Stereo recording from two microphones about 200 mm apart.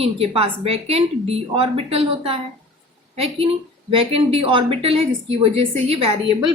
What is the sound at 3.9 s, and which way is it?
A woman's voice, 30° right (ahead or behind).